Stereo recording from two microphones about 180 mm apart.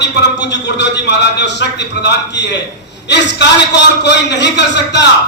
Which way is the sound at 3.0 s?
75° left (ahead or behind).